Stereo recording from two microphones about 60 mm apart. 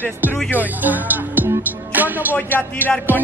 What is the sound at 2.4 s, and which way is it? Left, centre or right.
Speech, left.